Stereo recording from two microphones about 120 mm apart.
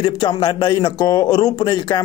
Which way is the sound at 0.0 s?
40° left (ahead or behind).